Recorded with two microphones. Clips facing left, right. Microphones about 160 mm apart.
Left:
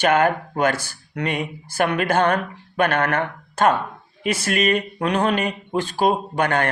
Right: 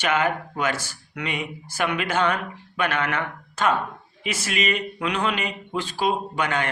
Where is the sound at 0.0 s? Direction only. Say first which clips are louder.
Left 5 dB; 50° left (ahead or behind).